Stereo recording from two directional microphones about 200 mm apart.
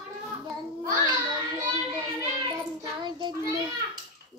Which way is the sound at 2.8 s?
20° right (ahead or behind).